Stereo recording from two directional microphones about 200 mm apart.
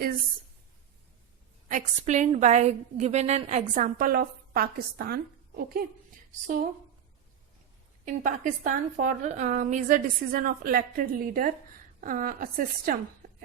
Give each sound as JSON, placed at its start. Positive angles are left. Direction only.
{"t": 1.6, "sound": "a woman's voice", "side_deg": -40}
{"t": 8.0, "sound": "a woman's voice", "side_deg": -40}